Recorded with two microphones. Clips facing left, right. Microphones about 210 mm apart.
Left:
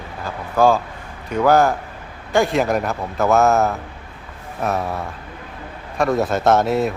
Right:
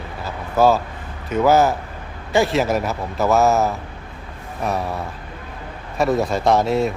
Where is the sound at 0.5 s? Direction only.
5° right (ahead or behind).